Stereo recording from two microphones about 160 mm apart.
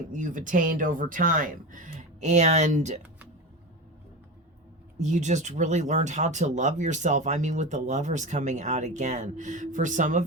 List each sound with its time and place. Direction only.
0.1 s speech: 55° right (ahead or behind)
4.9 s speech: 45° right (ahead or behind)